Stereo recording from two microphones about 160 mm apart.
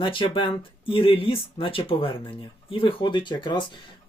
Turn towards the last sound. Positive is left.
turn(degrees=30)  # may be behind; listen again after turning